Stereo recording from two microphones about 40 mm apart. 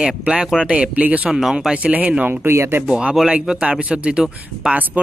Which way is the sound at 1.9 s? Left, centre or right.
Right.